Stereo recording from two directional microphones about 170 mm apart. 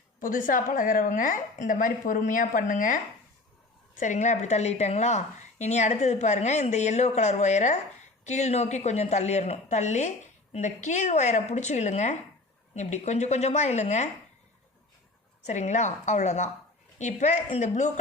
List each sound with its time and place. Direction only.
0.2 s a woman's voice: 55° left (ahead or behind)
4.0 s a woman's voice: 45° left (ahead or behind)
15.4 s a woman's voice: 45° left (ahead or behind)